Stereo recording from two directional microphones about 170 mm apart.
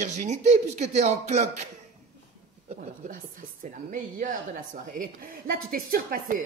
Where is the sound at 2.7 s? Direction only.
45° right (ahead or behind).